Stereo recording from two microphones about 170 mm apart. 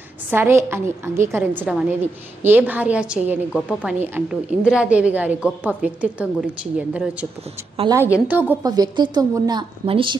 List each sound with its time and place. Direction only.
0.3 s a woman's voice: 15° right (ahead or behind)
8.3 s a woman's voice: 10° right (ahead or behind)
8.6 s a woman's voice: 25° right (ahead or behind)